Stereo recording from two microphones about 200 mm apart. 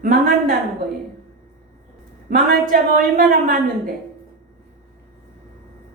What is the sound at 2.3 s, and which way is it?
A woman's voice, 45° right (ahead or behind).